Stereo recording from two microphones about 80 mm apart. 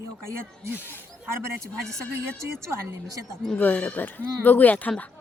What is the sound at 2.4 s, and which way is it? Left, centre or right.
Speech, right.